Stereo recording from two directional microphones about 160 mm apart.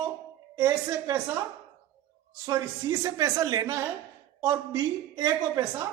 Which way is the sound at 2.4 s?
20° right (ahead or behind).